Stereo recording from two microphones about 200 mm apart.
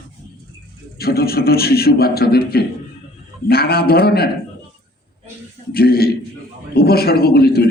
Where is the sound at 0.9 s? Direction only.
50° left (ahead or behind).